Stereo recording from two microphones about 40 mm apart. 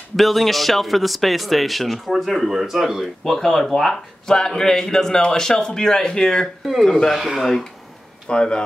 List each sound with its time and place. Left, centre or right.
0.1 s speech: centre
3.3 s speech: centre
3.9 s speech: centre
7.1 s speech: centre
8.3 s speech: left